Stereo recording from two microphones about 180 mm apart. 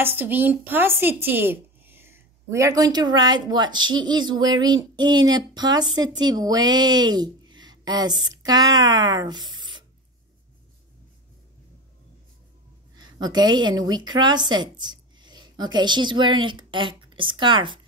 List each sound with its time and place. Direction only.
0.0 s speech: 10° right (ahead or behind)
12.9 s a woman's voice: 20° right (ahead or behind)